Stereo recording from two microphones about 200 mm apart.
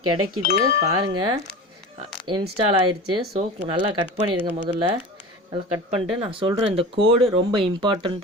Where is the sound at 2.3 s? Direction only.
25° right (ahead or behind).